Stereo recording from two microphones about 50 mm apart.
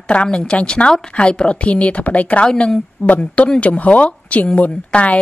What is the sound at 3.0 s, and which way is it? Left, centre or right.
Speech, left.